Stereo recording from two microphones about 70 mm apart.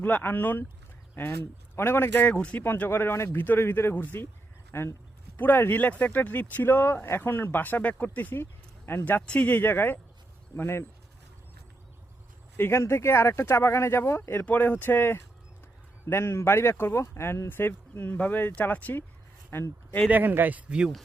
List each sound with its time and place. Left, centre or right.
0.0 s speech: left
2.3 s speech: centre
2.6 s speech: left
12.5 s speech: left
20.1 s speech: right